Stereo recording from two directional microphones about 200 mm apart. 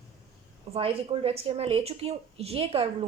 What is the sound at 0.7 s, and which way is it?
Speech, 30° right (ahead or behind).